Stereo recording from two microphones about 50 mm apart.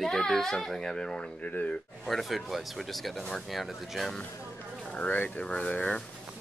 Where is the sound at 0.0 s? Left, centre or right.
Centre.